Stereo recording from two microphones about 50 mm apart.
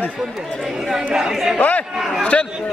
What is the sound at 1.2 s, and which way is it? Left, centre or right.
Speech, centre.